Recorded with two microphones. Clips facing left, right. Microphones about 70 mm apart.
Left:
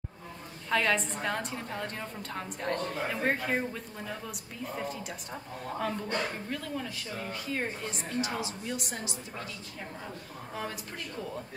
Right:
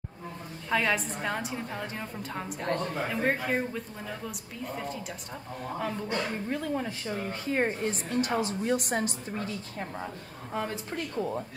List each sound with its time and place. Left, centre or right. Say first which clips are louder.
0.7 s a woman's voice: even; centre
6.5 s a woman's voice: right 5 dB; right